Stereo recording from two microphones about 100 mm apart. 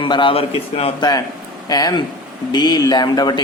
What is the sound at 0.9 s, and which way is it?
Speech, 40° left (ahead or behind).